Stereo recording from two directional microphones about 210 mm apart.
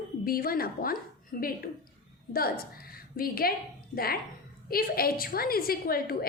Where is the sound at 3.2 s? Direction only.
45° left (ahead or behind).